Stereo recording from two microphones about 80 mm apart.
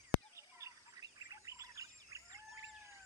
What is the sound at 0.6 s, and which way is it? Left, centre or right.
Chirp, right.